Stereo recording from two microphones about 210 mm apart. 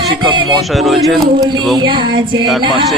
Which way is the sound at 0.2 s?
20° right (ahead or behind).